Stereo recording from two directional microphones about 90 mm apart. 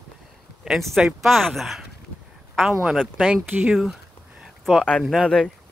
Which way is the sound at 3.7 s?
5° right (ahead or behind).